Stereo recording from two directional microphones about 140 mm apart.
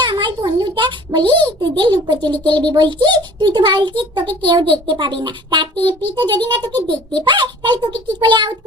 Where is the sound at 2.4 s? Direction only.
35° right (ahead or behind).